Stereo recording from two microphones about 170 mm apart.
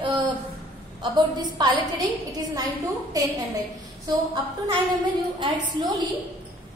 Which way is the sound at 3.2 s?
20° right (ahead or behind).